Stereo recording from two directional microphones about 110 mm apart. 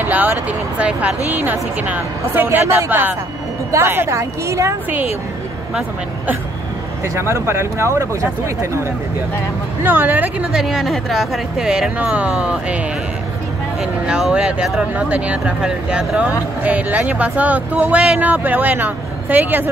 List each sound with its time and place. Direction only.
0.0 s a woman's voice: 15° right (ahead or behind)
7.2 s a woman's voice: 25° right (ahead or behind)
9.8 s speech: 15° right (ahead or behind)
10.5 s speech: 5° right (ahead or behind)
14.0 s speech: 10° right (ahead or behind)